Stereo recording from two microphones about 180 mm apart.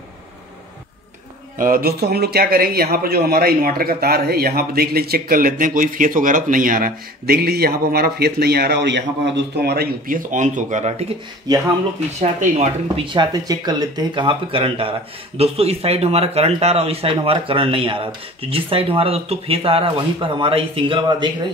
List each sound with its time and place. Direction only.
1.6 s speech: 55° right (ahead or behind); by 11.1 s 40° right (ahead or behind)
11.4 s speech: 20° right (ahead or behind)
12.2 s speech: 40° right (ahead or behind)
13.0 s speech: 25° right (ahead or behind)